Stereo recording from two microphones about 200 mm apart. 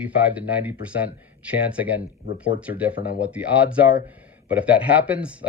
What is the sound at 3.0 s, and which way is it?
Speech, 55° left (ahead or behind).